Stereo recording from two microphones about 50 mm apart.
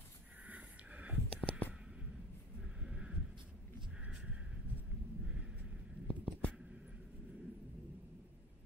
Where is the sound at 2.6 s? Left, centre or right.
Centre.